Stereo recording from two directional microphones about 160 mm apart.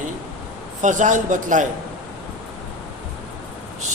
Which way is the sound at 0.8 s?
50° right (ahead or behind).